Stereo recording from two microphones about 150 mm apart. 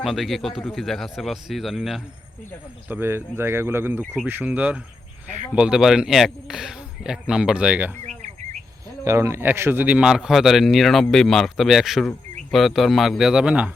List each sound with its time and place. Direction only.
0.0 s a man's voice: centre (ahead or behind)
2.9 s a man's voice: 15° right (ahead or behind)
9.0 s a man's voice: 20° right (ahead or behind)